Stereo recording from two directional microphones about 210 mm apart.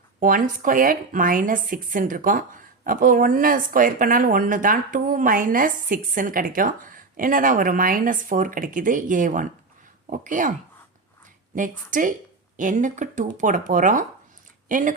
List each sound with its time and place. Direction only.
0.2 s speech: 40° right (ahead or behind)
11.5 s speech: 40° right (ahead or behind)